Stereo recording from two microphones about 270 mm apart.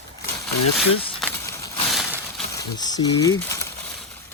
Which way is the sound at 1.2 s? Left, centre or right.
Centre.